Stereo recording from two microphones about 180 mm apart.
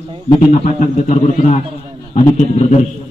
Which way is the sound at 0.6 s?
40° left (ahead or behind).